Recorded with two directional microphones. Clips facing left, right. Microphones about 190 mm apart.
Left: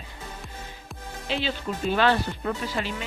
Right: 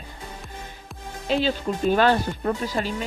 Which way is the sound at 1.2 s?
40° right (ahead or behind).